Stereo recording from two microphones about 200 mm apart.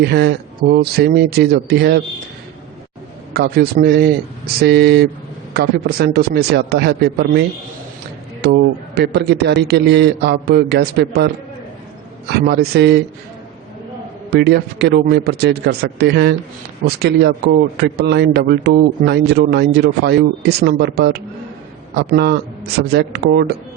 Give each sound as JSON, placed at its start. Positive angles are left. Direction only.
{"t": 0.0, "sound": "speech", "side_deg": -55}
{"t": 3.3, "sound": "speech", "side_deg": -50}
{"t": 8.4, "sound": "speech", "side_deg": -55}
{"t": 12.3, "sound": "speech", "side_deg": -55}
{"t": 14.3, "sound": "speech", "side_deg": -55}